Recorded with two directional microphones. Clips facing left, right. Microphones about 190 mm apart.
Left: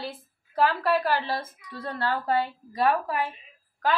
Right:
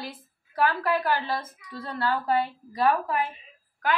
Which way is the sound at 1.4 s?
35° left (ahead or behind).